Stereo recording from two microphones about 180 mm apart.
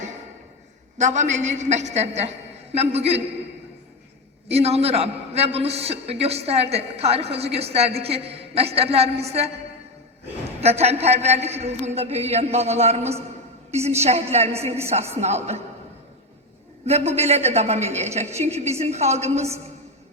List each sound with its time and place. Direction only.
0.9 s a man's voice: 40° right (ahead or behind)
4.4 s a man's voice: 35° right (ahead or behind)
10.6 s a man's voice: 35° right (ahead or behind)
16.8 s a man's voice: 35° right (ahead or behind)